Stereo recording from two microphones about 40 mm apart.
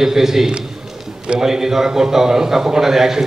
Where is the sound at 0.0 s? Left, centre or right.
Centre.